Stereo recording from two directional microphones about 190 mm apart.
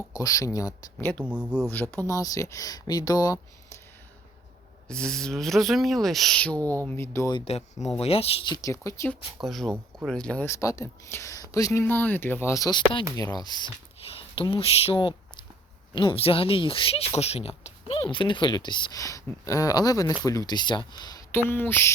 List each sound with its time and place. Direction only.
0.1 s speech: 20° left (ahead or behind)
1.2 s speech: 5° right (ahead or behind)
1.7 s speech: 10° left (ahead or behind)
4.9 s speech: 5° left (ahead or behind)
7.3 s speech: 30° left (ahead or behind); by 9.1 s 15° left (ahead or behind)
9.4 s speech: centre (ahead or behind)